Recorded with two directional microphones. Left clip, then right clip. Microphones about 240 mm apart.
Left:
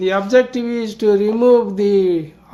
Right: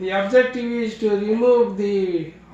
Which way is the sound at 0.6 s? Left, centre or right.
Centre.